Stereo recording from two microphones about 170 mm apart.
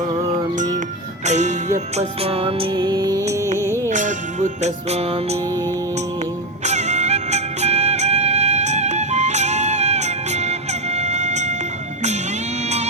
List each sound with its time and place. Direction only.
1.2 s music: 45° right (ahead or behind); by 3.2 s 20° right (ahead or behind)
3.8 s music: 45° right (ahead or behind)
6.7 s music: 40° right (ahead or behind)
12.6 s music: 40° right (ahead or behind)